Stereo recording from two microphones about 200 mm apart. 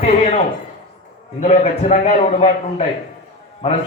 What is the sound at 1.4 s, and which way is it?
A man's voice, 35° left (ahead or behind).